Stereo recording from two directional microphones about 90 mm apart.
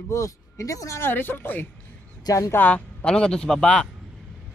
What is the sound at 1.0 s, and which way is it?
Speech, 25° left (ahead or behind).